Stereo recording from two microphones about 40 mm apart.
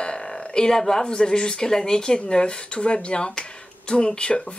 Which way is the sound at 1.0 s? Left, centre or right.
Centre.